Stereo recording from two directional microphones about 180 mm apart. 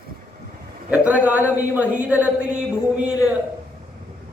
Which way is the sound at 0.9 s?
10° right (ahead or behind).